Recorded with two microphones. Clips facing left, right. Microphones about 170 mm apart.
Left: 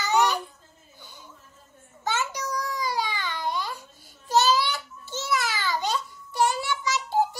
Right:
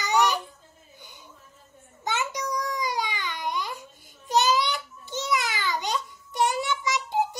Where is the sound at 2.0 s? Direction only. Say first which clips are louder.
Even; 20° right (ahead or behind).